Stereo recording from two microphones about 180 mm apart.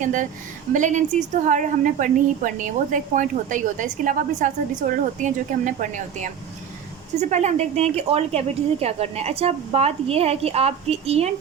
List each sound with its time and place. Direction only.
0.0 s a woman's voice: 45° right (ahead or behind)